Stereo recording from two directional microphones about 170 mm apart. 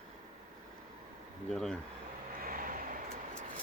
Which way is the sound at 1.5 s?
Centre (ahead or behind).